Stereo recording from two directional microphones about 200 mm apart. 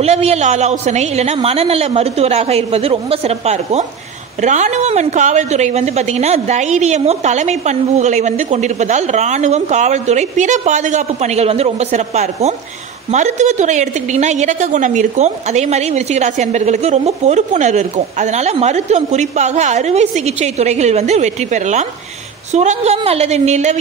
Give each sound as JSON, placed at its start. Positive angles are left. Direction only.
{"t": 0.0, "sound": "a woman's voice", "side_deg": -30}